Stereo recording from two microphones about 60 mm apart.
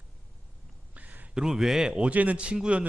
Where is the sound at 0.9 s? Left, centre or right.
Right.